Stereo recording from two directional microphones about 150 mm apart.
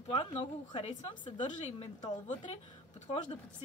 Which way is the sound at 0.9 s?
55° left (ahead or behind).